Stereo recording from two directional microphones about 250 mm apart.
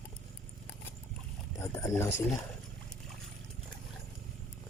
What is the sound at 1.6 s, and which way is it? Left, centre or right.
Speech, centre.